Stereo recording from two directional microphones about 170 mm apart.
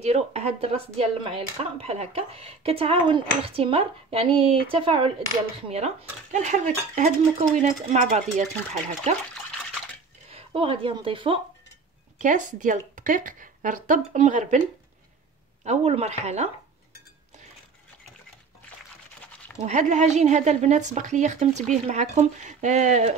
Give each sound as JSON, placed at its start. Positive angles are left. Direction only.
{"t": 0.0, "sound": "speech", "side_deg": -40}
{"t": 10.3, "sound": "speech", "side_deg": -35}
{"t": 12.2, "sound": "speech", "side_deg": -50}
{"t": 15.6, "sound": "speech", "side_deg": -40}
{"t": 19.6, "sound": "speech", "side_deg": -45}